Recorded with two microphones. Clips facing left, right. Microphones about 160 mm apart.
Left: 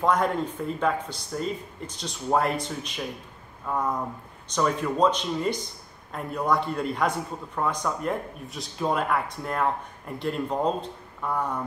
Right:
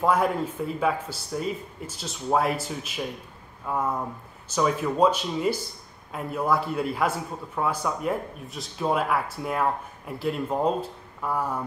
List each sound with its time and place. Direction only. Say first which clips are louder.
0.0 s speech: right 1 dB; 5° right (ahead or behind)